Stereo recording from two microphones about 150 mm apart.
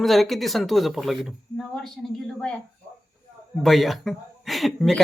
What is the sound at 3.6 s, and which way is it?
Speech, centre (ahead or behind).